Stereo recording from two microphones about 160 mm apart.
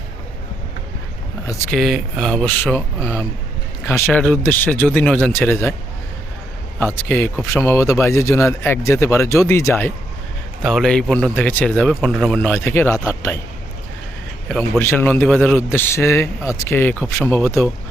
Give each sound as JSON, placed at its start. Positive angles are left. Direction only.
{"t": 1.7, "sound": "speech", "side_deg": 0}
{"t": 6.7, "sound": "speech", "side_deg": 10}
{"t": 10.6, "sound": "speech", "side_deg": 0}
{"t": 14.8, "sound": "speech", "side_deg": 15}